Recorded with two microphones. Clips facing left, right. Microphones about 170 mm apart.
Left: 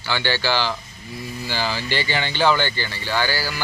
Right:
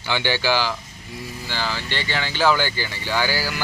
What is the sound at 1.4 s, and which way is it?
Speech, 5° left (ahead or behind).